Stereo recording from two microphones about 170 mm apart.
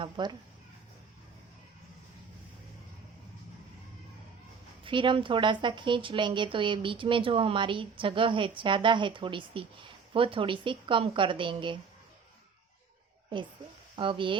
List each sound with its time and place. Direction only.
0.0 s a woman's voice: 25° right (ahead or behind)
4.8 s a woman's voice: 30° right (ahead or behind)
13.9 s speech: 30° right (ahead or behind)